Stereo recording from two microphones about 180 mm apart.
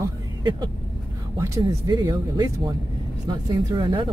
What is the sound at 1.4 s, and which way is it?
A woman's voice, 20° right (ahead or behind).